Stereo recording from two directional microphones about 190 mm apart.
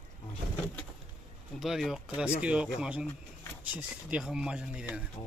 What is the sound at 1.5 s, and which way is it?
Speech, centre (ahead or behind).